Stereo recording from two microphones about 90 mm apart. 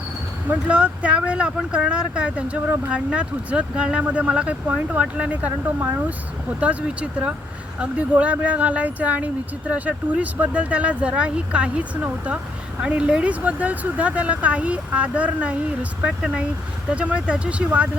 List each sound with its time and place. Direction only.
0.7 s speech: 10° right (ahead or behind)